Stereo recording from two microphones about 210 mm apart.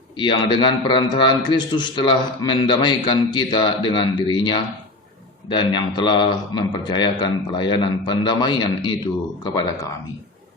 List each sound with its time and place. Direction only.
0.2 s a man's voice: 20° left (ahead or behind)